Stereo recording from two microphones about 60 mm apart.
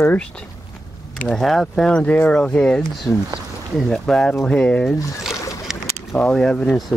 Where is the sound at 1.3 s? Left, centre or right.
Centre.